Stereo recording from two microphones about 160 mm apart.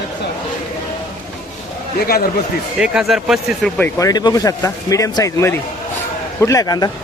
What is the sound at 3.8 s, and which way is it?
Speech, 20° left (ahead or behind).